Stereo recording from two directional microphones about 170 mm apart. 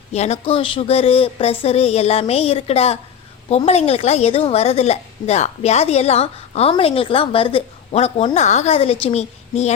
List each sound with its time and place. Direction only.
0.1 s a woman's voice: 40° left (ahead or behind)